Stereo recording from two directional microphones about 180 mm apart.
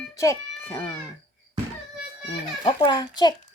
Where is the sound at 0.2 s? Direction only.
15° left (ahead or behind).